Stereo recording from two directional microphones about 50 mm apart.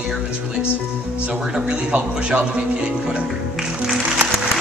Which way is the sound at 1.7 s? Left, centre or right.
Right.